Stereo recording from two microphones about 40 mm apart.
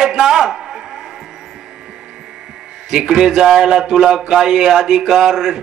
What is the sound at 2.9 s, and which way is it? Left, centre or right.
A man's voice, centre.